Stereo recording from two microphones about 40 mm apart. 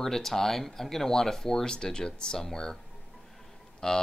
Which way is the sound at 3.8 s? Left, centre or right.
Centre.